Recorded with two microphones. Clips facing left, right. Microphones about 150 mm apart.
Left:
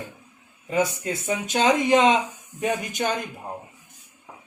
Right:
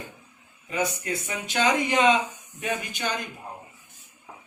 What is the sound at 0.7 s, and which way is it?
Speech, 25° left (ahead or behind).